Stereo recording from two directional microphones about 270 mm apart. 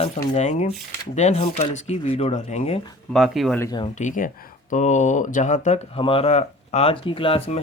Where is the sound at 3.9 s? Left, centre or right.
Left.